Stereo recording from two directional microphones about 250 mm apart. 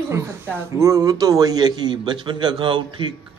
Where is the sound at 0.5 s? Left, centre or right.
Centre.